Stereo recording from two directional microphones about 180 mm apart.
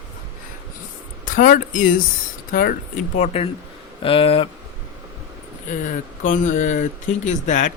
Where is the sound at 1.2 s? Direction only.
45° left (ahead or behind).